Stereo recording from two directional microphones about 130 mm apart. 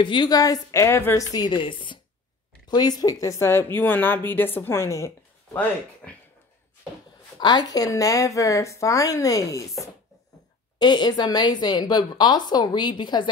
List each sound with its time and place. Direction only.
0.0 s speech: 35° left (ahead or behind); by 6.1 s 15° left (ahead or behind)
7.3 s speech: 35° left (ahead or behind)